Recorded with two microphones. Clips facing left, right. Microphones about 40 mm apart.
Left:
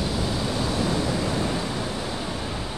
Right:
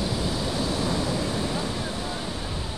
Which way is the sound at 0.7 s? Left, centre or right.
Left.